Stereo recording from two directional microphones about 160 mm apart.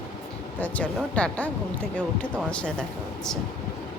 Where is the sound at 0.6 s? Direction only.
10° left (ahead or behind).